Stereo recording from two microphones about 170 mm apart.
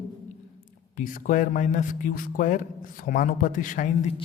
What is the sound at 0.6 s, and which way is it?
Speech, 50° left (ahead or behind).